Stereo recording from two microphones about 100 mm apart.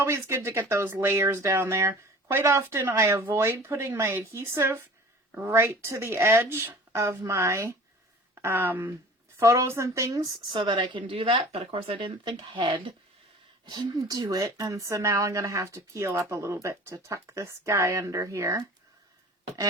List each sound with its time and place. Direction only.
0.0 s speech: 25° right (ahead or behind)
10.5 s speech: 50° right (ahead or behind)
13.7 s speech: 45° right (ahead or behind)